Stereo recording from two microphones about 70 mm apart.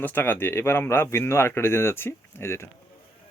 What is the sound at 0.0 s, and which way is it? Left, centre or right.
Speech, left.